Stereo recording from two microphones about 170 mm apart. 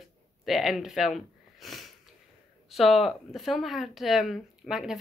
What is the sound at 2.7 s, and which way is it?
Speech, centre (ahead or behind).